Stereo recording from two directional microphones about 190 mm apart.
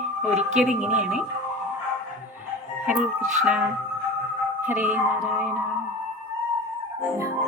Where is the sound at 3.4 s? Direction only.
5° right (ahead or behind).